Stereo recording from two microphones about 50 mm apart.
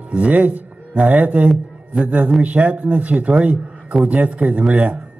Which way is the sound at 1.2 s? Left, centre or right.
Right.